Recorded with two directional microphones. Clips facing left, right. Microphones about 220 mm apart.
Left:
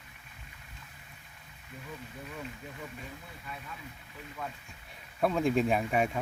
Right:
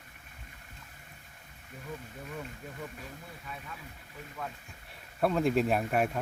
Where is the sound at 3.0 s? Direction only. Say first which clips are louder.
Even; centre (ahead or behind).